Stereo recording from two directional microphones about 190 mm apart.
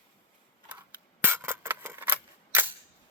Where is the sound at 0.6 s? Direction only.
10° right (ahead or behind).